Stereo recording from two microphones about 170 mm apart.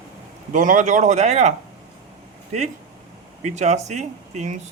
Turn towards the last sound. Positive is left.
turn(degrees=-45)  # may be behind; listen again after turning